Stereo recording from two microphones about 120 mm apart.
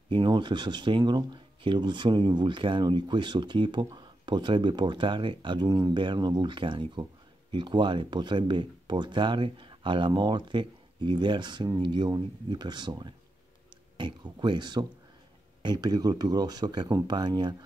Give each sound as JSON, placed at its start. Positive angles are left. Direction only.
{"t": 0.1, "sound": "speech", "side_deg": -40}